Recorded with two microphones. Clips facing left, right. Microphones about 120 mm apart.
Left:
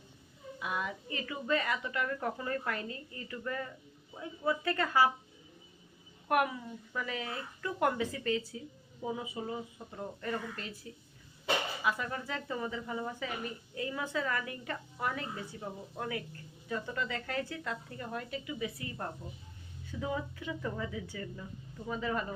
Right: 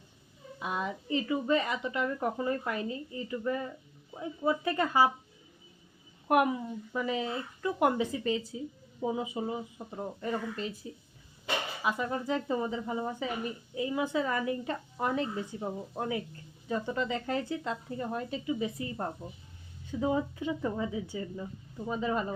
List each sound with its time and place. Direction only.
0.6 s a woman's voice: 25° right (ahead or behind)
6.2 s a woman's voice: 20° right (ahead or behind)
11.8 s a woman's voice: 20° right (ahead or behind)